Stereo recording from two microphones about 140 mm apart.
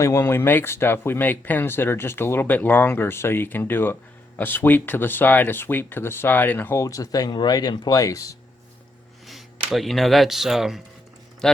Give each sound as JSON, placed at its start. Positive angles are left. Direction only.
{"t": 0.0, "sound": "speech", "side_deg": 20}
{"t": 9.7, "sound": "speech", "side_deg": 0}